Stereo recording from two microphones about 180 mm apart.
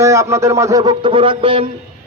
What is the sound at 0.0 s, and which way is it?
A man's voice, 15° right (ahead or behind).